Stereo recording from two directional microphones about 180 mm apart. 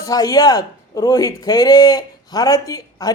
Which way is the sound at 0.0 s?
20° left (ahead or behind).